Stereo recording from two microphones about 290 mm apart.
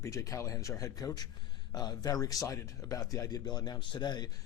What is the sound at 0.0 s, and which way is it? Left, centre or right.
Speech, centre.